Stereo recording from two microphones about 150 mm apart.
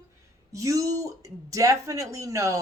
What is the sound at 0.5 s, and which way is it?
Speech, 20° right (ahead or behind).